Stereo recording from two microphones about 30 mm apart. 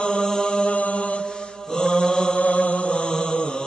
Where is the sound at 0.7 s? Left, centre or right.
Left.